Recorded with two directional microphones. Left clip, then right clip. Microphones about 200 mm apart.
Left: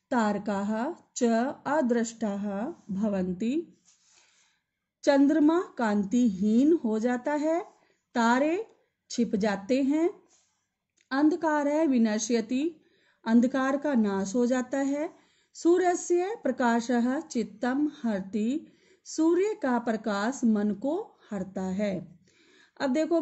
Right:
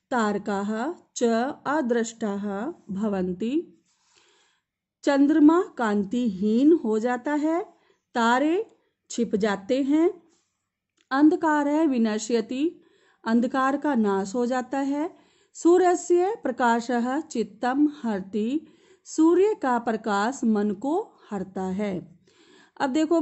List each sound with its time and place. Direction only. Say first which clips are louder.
0.1 s speech: right 3 dB; 40° right (ahead or behind)
5.0 s speech: right 3 dB; 40° right (ahead or behind)